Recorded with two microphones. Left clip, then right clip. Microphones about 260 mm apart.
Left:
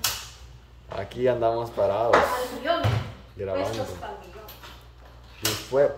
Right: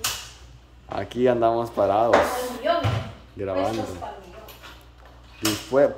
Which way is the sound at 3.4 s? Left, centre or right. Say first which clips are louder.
Right 2 dB; centre.